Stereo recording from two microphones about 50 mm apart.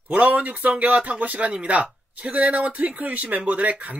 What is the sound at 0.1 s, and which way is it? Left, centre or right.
Speech, right.